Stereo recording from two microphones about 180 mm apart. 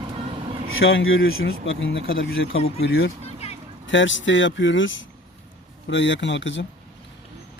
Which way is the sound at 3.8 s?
90° left.